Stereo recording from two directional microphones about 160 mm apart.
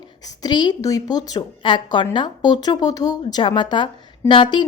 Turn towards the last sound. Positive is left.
turn(degrees=30)  # may be behind; listen again after turning